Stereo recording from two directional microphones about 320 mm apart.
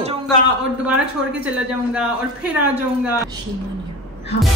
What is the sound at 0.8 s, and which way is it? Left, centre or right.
Speech, centre.